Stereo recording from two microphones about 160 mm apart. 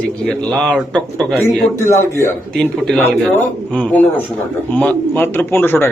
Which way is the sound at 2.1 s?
15° left (ahead or behind).